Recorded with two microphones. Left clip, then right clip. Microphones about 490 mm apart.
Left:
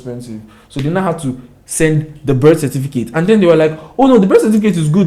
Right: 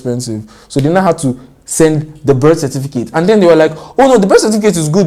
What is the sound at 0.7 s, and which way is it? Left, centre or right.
Speech, right.